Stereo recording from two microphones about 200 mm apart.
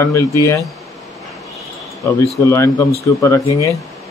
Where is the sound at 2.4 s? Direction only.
15° left (ahead or behind).